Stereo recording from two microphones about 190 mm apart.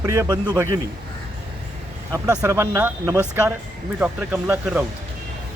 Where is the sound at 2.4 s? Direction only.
15° right (ahead or behind).